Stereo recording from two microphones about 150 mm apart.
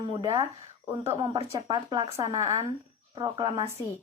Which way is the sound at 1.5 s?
30° right (ahead or behind).